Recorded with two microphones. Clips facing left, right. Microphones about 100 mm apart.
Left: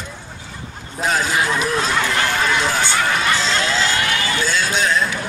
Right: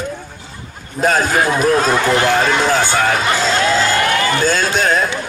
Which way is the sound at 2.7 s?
45° right (ahead or behind).